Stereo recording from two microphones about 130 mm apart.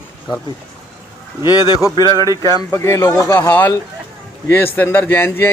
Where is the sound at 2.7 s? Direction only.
20° left (ahead or behind).